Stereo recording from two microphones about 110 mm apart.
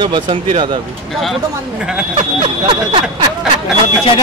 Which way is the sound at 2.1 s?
55° right (ahead or behind).